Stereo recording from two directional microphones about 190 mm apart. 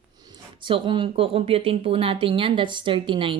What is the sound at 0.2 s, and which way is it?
Speech, 25° right (ahead or behind).